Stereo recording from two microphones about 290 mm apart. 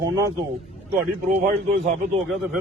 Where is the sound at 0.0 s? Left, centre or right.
Centre.